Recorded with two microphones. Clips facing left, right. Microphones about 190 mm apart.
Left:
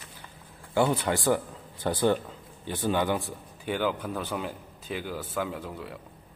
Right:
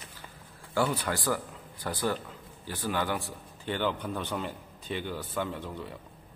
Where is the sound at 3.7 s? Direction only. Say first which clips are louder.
Left 2 dB; 5° left (ahead or behind).